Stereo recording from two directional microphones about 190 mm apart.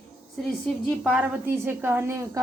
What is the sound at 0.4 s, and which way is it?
A woman's voice, centre (ahead or behind).